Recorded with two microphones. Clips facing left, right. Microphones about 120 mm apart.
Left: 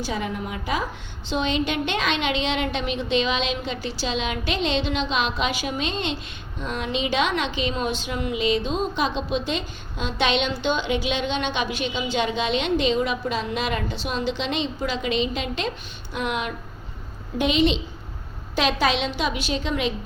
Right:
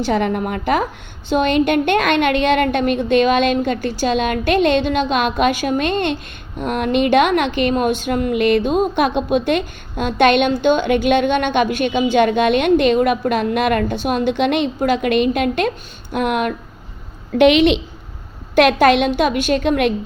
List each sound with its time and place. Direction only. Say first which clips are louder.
0.0 s a woman's voice: right 10 dB; 65° right (ahead or behind)
17.3 s a woman's voice: right 9 dB; 70° right (ahead or behind)